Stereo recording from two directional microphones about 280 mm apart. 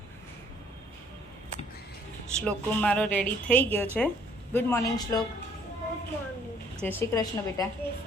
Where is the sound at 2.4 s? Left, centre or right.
Centre.